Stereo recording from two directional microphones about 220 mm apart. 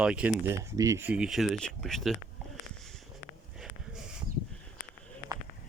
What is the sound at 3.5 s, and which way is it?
Sniff, 5° right (ahead or behind).